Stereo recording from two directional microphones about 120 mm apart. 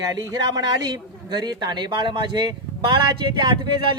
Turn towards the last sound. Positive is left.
turn(degrees=-40)  # may be behind; listen again after turning